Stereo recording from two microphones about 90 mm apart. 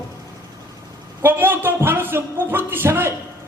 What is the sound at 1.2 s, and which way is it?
A man's voice, 25° right (ahead or behind).